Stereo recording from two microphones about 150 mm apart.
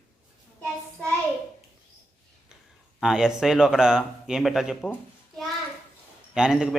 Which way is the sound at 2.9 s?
5° right (ahead or behind).